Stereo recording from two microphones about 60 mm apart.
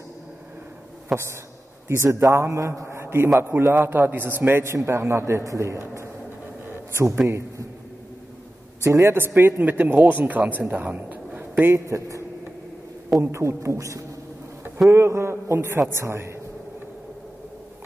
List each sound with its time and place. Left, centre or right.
1.1 s speech: centre
1.9 s a man's voice: right
4.7 s a man's voice: right
7.2 s a man's voice: right
8.8 s a man's voice: right
9.1 s a man's voice: right
11.7 s a man's voice: right
13.2 s a man's voice: right
14.9 s a man's voice: right